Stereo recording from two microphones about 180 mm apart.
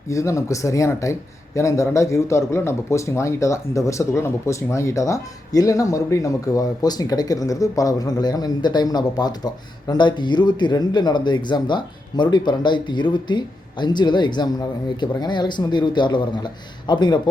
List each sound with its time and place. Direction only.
0.1 s speech: 15° left (ahead or behind)